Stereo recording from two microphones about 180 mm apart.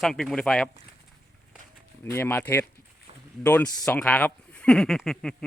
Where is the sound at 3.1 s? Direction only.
35° right (ahead or behind).